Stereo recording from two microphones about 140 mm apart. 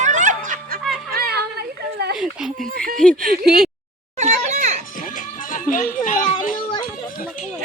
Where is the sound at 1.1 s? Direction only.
90° right.